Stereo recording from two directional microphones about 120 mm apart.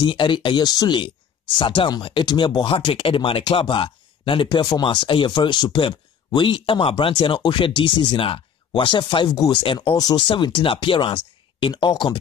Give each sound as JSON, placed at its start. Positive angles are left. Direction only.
{"t": 0.0, "sound": "speech", "side_deg": 45}